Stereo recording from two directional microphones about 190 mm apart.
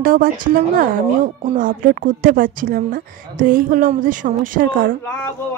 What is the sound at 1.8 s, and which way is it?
Speech, 45° right (ahead or behind).